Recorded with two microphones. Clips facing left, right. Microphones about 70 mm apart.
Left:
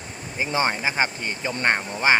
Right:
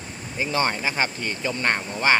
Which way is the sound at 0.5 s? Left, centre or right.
Centre.